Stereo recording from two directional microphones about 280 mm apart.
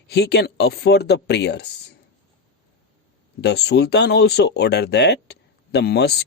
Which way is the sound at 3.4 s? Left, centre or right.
Left.